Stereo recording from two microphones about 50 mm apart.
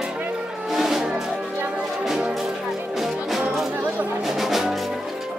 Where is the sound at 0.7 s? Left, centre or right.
Centre.